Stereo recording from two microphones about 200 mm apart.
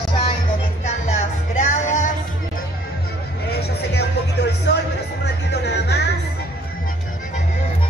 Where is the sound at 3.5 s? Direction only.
55° left (ahead or behind).